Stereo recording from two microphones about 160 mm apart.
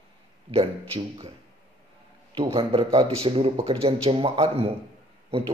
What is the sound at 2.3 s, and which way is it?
Speech, 35° right (ahead or behind).